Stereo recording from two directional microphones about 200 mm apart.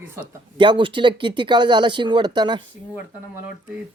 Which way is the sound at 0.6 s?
25° right (ahead or behind).